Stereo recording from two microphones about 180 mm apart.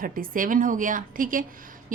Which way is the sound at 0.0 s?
50° right (ahead or behind).